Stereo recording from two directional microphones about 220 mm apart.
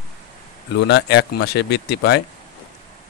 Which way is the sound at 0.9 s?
50° left (ahead or behind).